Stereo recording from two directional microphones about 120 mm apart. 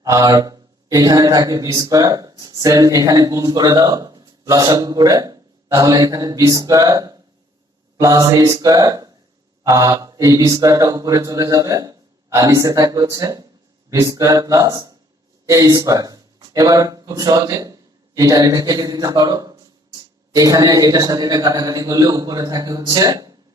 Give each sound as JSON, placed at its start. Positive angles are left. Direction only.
{"t": 0.0, "sound": "a man's voice", "side_deg": -30}